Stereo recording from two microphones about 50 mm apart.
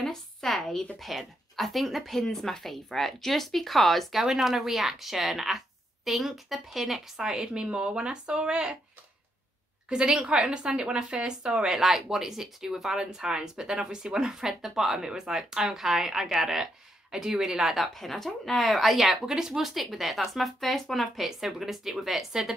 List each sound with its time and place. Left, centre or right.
0.0 s a sound: centre
0.9 s speech: centre
4.2 s speech: centre
7.2 s a woman's voice: centre
9.8 s a woman's voice: centre
17.9 s speech: centre